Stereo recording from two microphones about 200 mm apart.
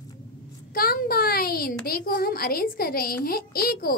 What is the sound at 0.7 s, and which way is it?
A child's voice, 50° left (ahead or behind).